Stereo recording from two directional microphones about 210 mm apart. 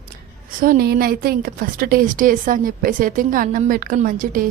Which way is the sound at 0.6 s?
45° right (ahead or behind).